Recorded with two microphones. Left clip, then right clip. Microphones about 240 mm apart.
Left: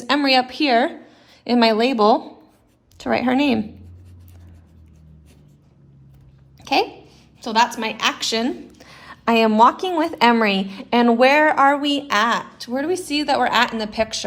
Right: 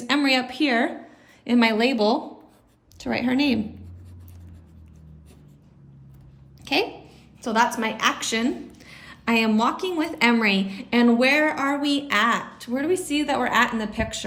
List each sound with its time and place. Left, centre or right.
0.0 s a woman's voice: centre
6.6 s a sound: centre
7.4 s a woman's voice: left